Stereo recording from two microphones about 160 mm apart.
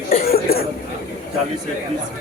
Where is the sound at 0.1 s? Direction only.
70° left (ahead or behind).